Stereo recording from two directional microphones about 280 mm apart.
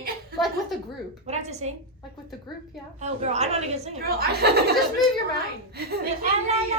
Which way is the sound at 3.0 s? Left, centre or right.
Right.